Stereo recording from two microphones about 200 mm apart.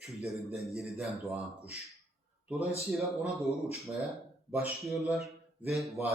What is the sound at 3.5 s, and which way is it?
Speech, 30° left (ahead or behind).